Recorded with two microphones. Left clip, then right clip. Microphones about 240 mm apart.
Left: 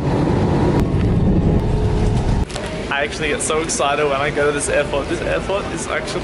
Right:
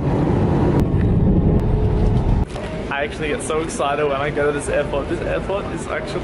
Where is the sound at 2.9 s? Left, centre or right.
Centre.